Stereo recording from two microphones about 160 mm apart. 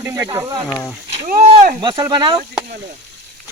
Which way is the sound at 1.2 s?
60° right (ahead or behind).